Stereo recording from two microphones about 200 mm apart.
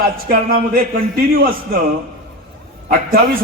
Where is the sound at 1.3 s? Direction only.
45° right (ahead or behind).